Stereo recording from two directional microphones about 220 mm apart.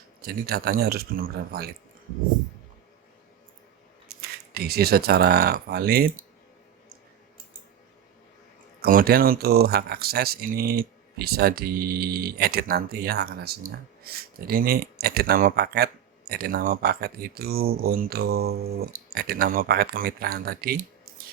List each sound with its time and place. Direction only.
0.2 s speech: 45° right (ahead or behind)
4.1 s speech: 45° right (ahead or behind)
8.8 s speech: 40° right (ahead or behind)